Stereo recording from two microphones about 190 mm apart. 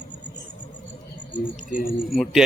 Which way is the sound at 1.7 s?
45° left (ahead or behind).